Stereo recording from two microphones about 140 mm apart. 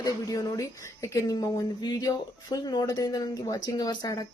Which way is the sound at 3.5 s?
30° left (ahead or behind).